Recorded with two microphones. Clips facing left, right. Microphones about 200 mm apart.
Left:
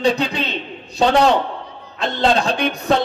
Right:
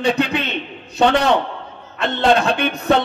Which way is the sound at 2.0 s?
60° right (ahead or behind).